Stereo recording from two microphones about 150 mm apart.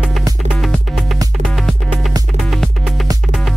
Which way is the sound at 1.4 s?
Centre (ahead or behind).